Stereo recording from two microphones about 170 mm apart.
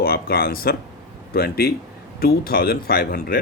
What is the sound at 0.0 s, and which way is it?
Speech, 60° left (ahead or behind).